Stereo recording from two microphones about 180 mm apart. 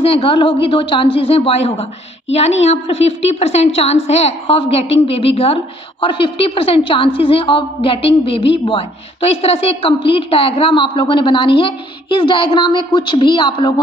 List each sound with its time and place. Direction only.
0.0 s a woman's voice: 30° left (ahead or behind)